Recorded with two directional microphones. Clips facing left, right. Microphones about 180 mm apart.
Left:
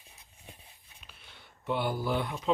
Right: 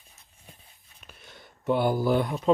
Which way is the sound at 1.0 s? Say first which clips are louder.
Right 7 dB; 45° right (ahead or behind).